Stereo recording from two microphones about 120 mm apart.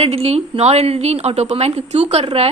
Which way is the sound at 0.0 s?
60° right (ahead or behind).